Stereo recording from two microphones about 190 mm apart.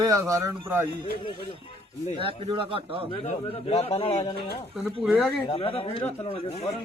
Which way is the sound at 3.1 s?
30° left (ahead or behind).